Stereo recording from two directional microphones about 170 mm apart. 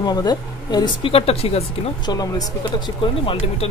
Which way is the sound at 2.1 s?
25° left (ahead or behind).